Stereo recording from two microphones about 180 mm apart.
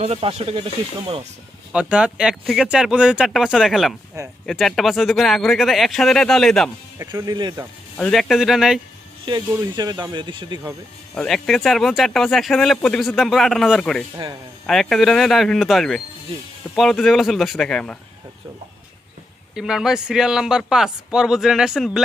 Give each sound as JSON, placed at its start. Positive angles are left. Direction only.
{"t": 0.0, "sound": "speech", "side_deg": -35}
{"t": 1.7, "sound": "speech", "side_deg": -5}
{"t": 7.0, "sound": "speech", "side_deg": -20}
{"t": 7.9, "sound": "speech", "side_deg": 5}
{"t": 9.2, "sound": "speech", "side_deg": -25}
{"t": 11.1, "sound": "speech", "side_deg": 0}
{"t": 19.5, "sound": "speech", "side_deg": 0}